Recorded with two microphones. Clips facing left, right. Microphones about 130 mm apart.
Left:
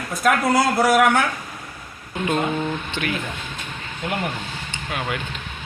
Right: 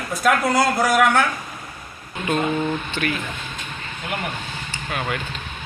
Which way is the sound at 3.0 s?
15° left (ahead or behind).